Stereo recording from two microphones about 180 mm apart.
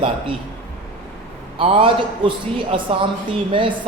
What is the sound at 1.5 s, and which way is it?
A man's voice, 30° right (ahead or behind).